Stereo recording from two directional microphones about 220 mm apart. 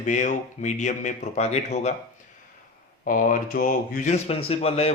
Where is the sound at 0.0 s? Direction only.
35° left (ahead or behind).